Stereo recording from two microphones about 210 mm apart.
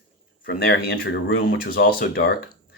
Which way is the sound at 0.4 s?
50° left (ahead or behind).